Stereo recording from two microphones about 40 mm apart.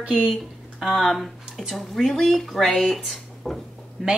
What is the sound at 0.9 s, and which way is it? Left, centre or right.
Speech, centre.